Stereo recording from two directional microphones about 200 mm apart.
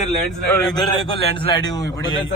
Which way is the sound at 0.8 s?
20° left (ahead or behind).